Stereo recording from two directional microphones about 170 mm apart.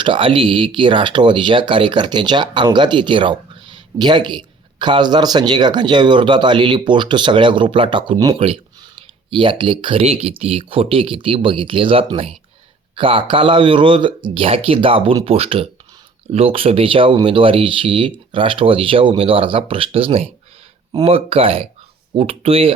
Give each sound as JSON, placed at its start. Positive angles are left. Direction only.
{"t": 0.0, "sound": "speech", "side_deg": -30}